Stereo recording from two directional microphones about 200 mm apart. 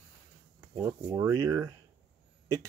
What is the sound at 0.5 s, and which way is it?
Speech, 15° right (ahead or behind).